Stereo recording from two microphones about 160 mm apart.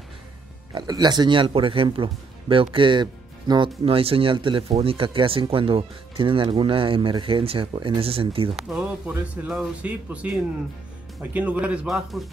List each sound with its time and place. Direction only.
0.7 s speech: 25° right (ahead or behind)
8.5 s a man's voice: 5° right (ahead or behind)
11.3 s a man's voice: 10° right (ahead or behind)